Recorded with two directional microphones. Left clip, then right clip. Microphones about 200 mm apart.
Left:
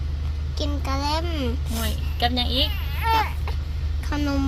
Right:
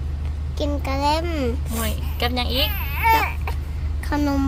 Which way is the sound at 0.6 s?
15° right (ahead or behind).